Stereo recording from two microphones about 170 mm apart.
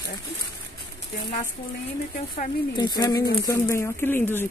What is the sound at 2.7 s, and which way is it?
Speech, 25° left (ahead or behind).